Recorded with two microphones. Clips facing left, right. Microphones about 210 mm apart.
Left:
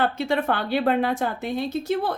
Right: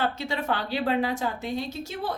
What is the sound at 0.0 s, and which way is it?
A woman's voice, 55° left (ahead or behind).